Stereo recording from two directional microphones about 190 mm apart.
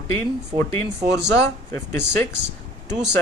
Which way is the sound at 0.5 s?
30° right (ahead or behind).